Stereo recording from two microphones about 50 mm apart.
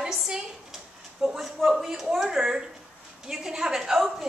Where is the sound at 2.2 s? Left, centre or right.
Centre.